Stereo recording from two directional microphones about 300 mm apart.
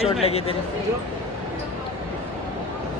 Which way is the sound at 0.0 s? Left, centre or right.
Centre.